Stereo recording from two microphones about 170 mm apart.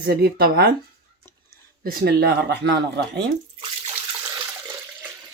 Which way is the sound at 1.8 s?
70° right (ahead or behind).